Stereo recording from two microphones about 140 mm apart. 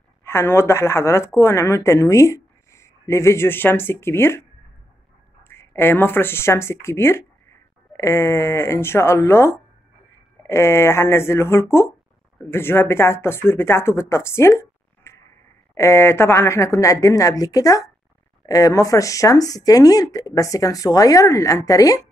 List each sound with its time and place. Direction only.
0.2 s speech: 15° left (ahead or behind)
5.4 s speech: 15° left (ahead or behind)